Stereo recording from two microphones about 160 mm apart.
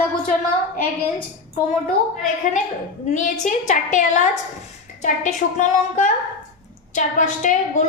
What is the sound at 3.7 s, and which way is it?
A woman's voice, 50° left (ahead or behind).